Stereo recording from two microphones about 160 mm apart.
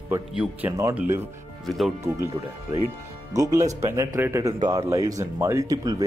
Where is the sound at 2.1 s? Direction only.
20° right (ahead or behind).